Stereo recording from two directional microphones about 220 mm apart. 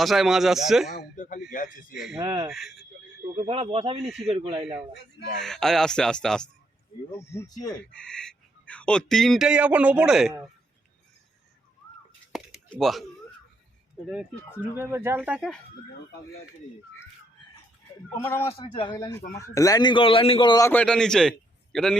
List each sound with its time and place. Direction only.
0.0 s speech: centre (ahead or behind)
0.9 s speech: 35° left (ahead or behind)
2.1 s speech: 20° right (ahead or behind)
2.5 s speech: centre (ahead or behind)
3.3 s speech: 25° right (ahead or behind)
4.0 s speech: centre (ahead or behind)
4.3 s speech: 25° right (ahead or behind)
5.4 s a man's voice: centre (ahead or behind)
7.9 s speech: 5° left (ahead or behind)
12.3 s a sound: centre (ahead or behind)
14.1 s speech: 5° right (ahead or behind)
18.1 s a man's voice: 10° left (ahead or behind)
18.4 s a man's voice: 25° left (ahead or behind); by 21.9 s centre (ahead or behind)